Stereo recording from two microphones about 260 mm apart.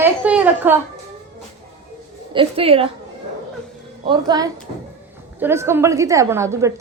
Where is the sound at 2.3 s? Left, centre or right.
Right.